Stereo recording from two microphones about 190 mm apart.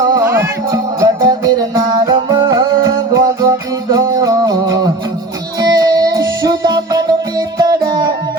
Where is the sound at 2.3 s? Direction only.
20° right (ahead or behind).